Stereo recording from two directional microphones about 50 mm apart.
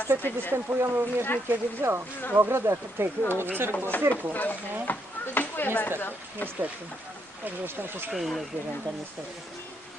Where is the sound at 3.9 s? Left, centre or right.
Left.